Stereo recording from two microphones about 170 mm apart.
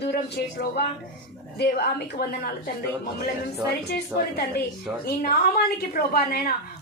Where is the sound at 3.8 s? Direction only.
70° left (ahead or behind).